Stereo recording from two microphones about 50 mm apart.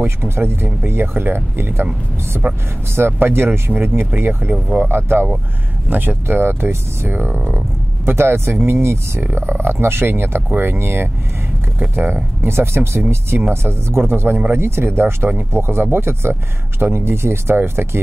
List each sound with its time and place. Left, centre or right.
0.0 s speech: right
2.4 s speech: right
8.0 s speech: right